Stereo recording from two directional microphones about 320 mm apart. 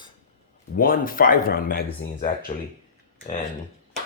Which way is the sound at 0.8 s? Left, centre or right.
Left.